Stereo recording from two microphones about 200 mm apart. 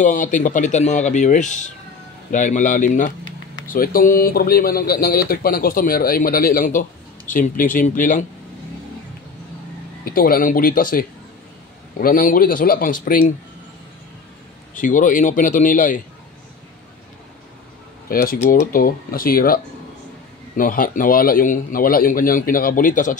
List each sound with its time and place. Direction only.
0.0 s speech: 40° left (ahead or behind)
10.0 s speech: 45° left (ahead or behind)
14.7 s speech: 40° left (ahead or behind)
18.0 s speech: 45° left (ahead or behind)